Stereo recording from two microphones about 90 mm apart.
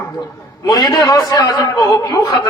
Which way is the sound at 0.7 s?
50° left (ahead or behind).